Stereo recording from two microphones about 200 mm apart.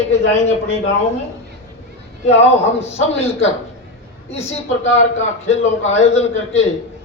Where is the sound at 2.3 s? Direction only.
30° left (ahead or behind).